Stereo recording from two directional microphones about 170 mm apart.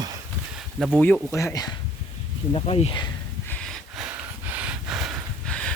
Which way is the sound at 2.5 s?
35° left (ahead or behind).